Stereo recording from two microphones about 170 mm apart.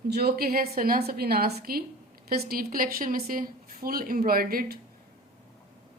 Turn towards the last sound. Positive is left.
turn(degrees=-60)  # may be behind; listen again after turning